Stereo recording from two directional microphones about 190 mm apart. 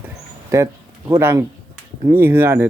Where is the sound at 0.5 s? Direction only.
15° right (ahead or behind).